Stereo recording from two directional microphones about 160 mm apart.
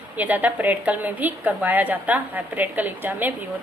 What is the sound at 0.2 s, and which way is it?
A woman's voice, 10° right (ahead or behind).